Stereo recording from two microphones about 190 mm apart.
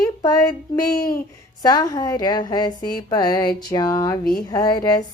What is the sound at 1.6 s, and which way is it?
A woman's voice, 20° left (ahead or behind).